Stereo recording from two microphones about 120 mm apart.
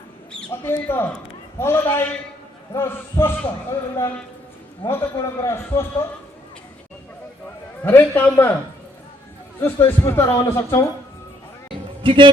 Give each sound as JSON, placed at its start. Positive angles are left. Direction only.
{"t": 0.5, "sound": "a man's voice", "side_deg": 20}
{"t": 7.9, "sound": "a man's voice", "side_deg": 15}
{"t": 9.6, "sound": "a man's voice", "side_deg": 20}
{"t": 12.0, "sound": "speech", "side_deg": -45}